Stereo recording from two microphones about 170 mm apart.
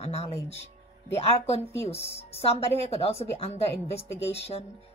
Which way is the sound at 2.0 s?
35° left (ahead or behind).